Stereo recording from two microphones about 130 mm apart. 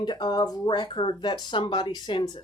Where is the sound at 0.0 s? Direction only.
35° left (ahead or behind).